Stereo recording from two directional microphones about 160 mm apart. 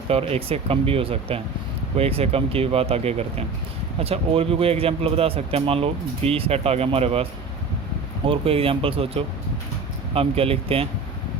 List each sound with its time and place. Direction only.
0.1 s speech: 40° right (ahead or behind)